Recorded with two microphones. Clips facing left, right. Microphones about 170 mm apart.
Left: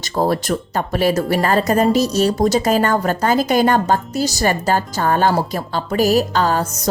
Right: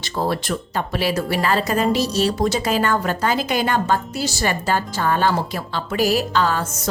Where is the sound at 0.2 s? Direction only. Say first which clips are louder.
Left 5 dB; 45° left (ahead or behind).